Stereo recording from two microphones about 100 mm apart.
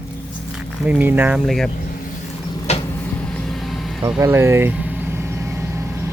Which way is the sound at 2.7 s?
90° left.